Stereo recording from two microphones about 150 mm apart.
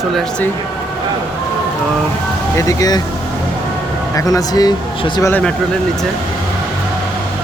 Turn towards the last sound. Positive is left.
turn(degrees=5)  # may be behind; listen again after turning